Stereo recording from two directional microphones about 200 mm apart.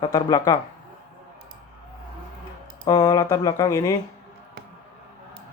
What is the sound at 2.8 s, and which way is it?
Speech, 20° left (ahead or behind).